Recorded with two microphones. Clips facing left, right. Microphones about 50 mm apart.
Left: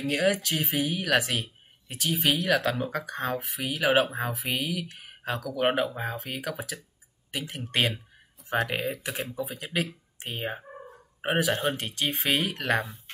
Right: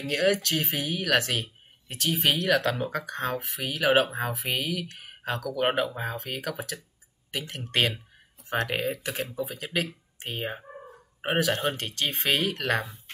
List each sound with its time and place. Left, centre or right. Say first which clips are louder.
0.0 s speech: right 1 dB; centre